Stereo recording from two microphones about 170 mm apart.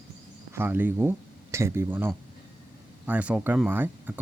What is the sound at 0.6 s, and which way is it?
Speech, 10° right (ahead or behind).